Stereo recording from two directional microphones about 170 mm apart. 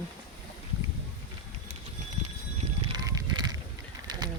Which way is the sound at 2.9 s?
20° right (ahead or behind).